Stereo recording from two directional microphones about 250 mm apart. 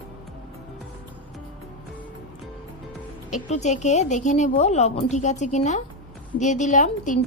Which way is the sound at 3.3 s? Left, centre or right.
Left.